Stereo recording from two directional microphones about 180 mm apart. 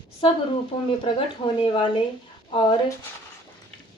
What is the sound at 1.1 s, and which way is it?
Speech, 25° left (ahead or behind).